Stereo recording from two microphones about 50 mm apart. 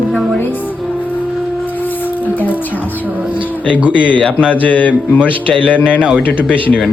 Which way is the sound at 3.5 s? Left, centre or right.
Left.